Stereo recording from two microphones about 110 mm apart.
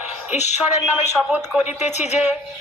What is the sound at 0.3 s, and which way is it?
Speech, 90° left.